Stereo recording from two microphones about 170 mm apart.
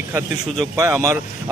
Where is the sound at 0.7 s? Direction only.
15° right (ahead or behind).